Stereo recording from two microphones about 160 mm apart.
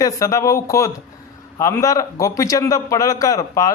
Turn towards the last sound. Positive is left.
turn(degrees=20)  # may be behind; listen again after turning